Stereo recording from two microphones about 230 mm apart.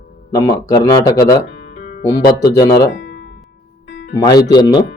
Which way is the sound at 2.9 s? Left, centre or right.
Left.